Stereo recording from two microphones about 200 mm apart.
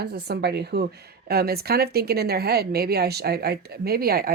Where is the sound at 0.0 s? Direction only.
55° right (ahead or behind).